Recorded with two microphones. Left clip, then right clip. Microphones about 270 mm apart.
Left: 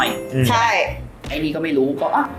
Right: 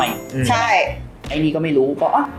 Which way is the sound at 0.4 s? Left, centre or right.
Centre.